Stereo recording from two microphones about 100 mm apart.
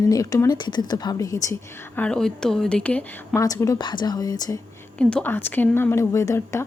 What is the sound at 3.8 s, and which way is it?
Speech, 50° left (ahead or behind).